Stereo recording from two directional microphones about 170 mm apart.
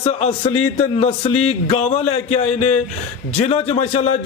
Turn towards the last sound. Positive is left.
turn(degrees=40)  # may be behind; listen again after turning